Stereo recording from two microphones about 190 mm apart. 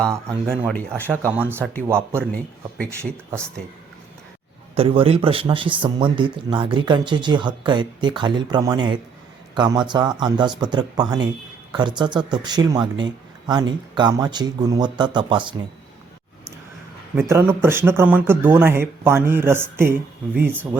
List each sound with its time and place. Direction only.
0.9 s speech: 10° right (ahead or behind)
4.7 s speech: 30° right (ahead or behind)
17.2 s speech: 15° right (ahead or behind)